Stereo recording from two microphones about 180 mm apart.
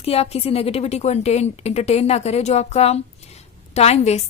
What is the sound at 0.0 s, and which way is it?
A woman's voice, 35° left (ahead or behind).